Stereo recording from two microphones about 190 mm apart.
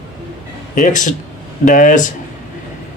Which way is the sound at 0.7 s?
40° left (ahead or behind).